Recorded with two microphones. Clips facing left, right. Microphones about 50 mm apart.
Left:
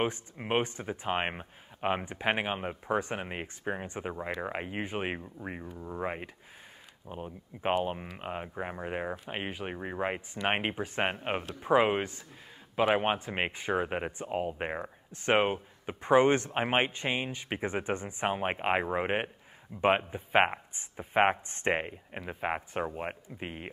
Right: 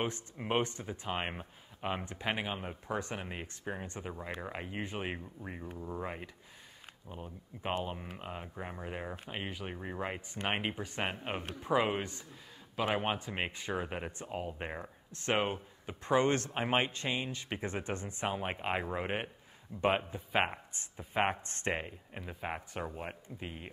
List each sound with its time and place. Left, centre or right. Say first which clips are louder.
0.0 s speech: left 5 dB; left